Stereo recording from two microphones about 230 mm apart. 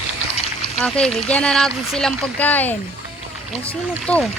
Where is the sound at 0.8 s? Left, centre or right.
Centre.